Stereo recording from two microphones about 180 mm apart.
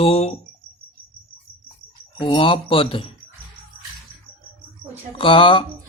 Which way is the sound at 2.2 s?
30° left (ahead or behind).